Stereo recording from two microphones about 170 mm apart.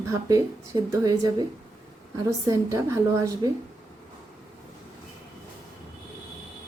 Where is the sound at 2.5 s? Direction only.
20° right (ahead or behind).